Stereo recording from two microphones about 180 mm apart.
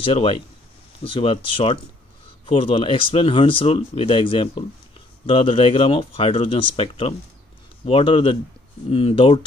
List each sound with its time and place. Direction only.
0.0 s speech: 30° left (ahead or behind)